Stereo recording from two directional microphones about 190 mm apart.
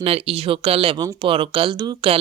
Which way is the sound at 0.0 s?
30° right (ahead or behind).